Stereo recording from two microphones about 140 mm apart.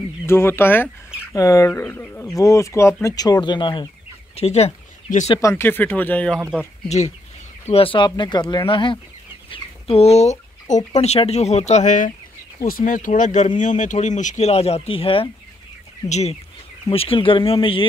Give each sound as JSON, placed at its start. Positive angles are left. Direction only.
{"t": 0.3, "sound": "speech", "side_deg": 15}
{"t": 4.4, "sound": "speech", "side_deg": 50}
{"t": 5.4, "sound": "speech", "side_deg": 20}
{"t": 7.6, "sound": "speech", "side_deg": 45}
{"t": 12.6, "sound": "speech", "side_deg": 80}
{"t": 16.1, "sound": "speech", "side_deg": 50}